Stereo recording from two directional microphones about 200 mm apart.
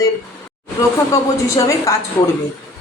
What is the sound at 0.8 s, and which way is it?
Speech, 15° left (ahead or behind).